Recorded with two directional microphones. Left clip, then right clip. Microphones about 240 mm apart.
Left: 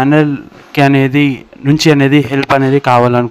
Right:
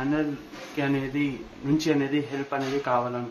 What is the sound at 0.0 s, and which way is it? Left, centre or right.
Speech, left.